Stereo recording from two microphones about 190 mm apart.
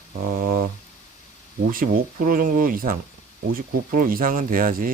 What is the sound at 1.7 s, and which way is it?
Speech, 50° right (ahead or behind).